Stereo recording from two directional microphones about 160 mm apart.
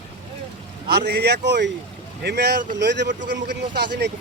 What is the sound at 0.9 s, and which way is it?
Speech, 90° right.